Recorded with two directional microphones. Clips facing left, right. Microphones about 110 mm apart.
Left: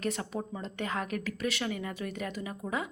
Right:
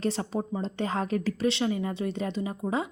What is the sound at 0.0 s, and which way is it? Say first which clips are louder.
Speech: right 5 dB; 30° right (ahead or behind).